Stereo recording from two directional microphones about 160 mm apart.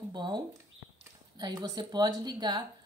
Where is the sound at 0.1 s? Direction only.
30° right (ahead or behind).